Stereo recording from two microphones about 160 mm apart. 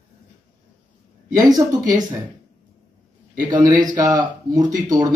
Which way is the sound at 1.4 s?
25° right (ahead or behind).